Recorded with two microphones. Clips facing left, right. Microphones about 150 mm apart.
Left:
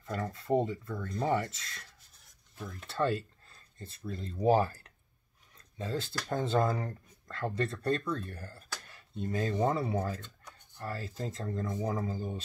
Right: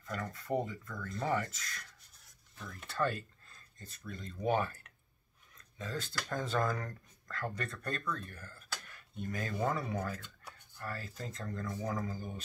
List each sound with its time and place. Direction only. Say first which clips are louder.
0.0 s speech: left 4 dB; 25° left (ahead or behind)
2.9 s speech: left 4 dB; 30° left (ahead or behind)